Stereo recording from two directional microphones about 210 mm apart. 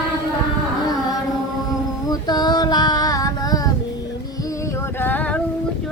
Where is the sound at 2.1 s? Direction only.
20° left (ahead or behind).